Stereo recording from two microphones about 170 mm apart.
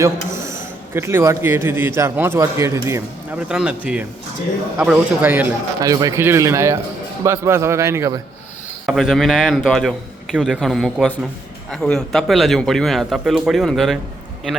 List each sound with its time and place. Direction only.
0.0 s a man's voice: 15° right (ahead or behind)
3.5 s a man's voice: 5° right (ahead or behind)
5.8 s speech: 20° right (ahead or behind)
8.9 s a man's voice: centre (ahead or behind)